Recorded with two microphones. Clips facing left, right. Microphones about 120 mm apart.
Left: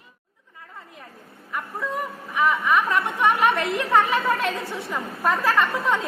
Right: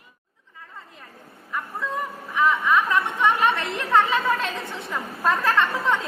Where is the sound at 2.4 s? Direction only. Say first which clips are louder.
Even; 10° left (ahead or behind).